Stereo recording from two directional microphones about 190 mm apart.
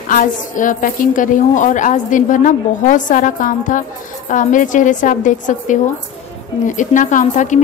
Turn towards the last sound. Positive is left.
turn(degrees=40)  # may be behind; listen again after turning